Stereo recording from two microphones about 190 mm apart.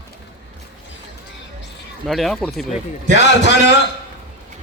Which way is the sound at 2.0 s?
Centre (ahead or behind).